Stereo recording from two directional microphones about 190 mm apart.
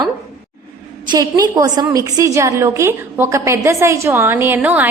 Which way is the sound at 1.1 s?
20° right (ahead or behind).